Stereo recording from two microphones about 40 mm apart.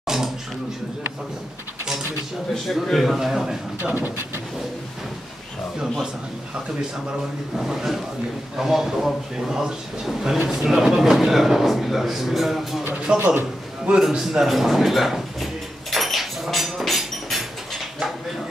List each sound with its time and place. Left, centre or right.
0.0 s a sound: centre
2.7 s a man's voice: centre
3.9 s speech: right
7.5 s a man's voice: centre
12.9 s speech: right
13.9 s a sound: centre